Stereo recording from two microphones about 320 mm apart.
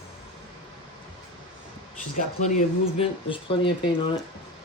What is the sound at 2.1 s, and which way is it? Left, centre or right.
Speech, left.